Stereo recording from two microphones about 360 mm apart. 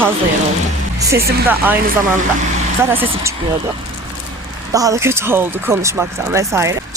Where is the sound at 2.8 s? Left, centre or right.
Centre.